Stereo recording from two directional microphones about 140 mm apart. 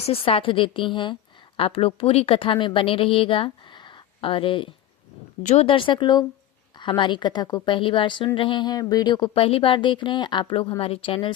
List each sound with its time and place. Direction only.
0.0 s a woman's voice: 40° left (ahead or behind)
5.4 s speech: 55° left (ahead or behind)
5.6 s a woman's voice: 35° left (ahead or behind)
9.3 s a woman's voice: 40° left (ahead or behind)